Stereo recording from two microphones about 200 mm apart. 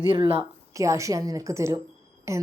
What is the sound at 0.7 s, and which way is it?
A woman's voice, 15° right (ahead or behind).